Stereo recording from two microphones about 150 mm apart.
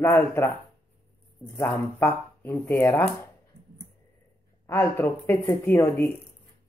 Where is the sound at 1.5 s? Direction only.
15° left (ahead or behind).